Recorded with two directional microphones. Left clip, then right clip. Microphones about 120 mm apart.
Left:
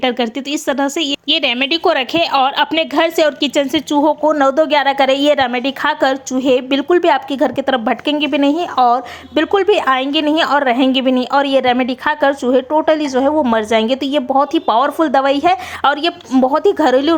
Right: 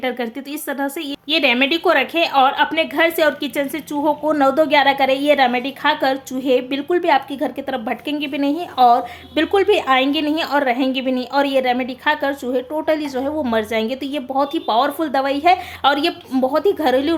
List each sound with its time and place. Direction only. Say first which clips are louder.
0.7 s a woman's voice: left 7 dB; 40° left (ahead or behind)
4.2 s a woman's voice: left 3 dB; 25° left (ahead or behind); by 17.2 s 40° left (ahead or behind)